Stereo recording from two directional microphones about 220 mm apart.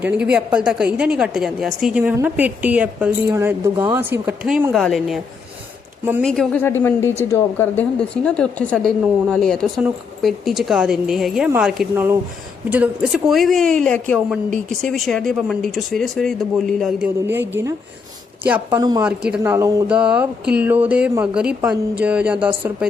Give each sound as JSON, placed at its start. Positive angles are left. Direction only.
{"t": 0.3, "sound": "a woman's voice", "side_deg": -5}
{"t": 6.2, "sound": "a woman's voice", "side_deg": 5}
{"t": 17.2, "sound": "music", "side_deg": -10}
{"t": 18.8, "sound": "music", "side_deg": -20}
{"t": 20.5, "sound": "a woman's voice", "side_deg": -5}